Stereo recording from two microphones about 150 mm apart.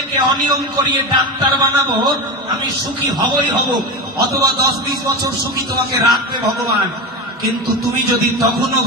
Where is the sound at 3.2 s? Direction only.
30° right (ahead or behind).